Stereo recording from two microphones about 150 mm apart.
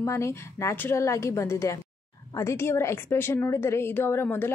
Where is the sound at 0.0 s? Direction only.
20° left (ahead or behind).